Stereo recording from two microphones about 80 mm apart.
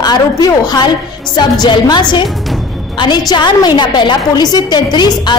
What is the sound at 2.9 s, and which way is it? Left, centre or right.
A woman's voice, left.